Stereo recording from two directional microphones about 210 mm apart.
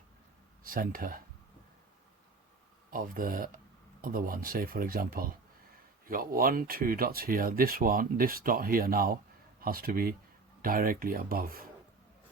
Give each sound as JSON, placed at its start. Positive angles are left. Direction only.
{"t": 0.6, "sound": "speech", "side_deg": -40}
{"t": 2.9, "sound": "speech", "side_deg": -40}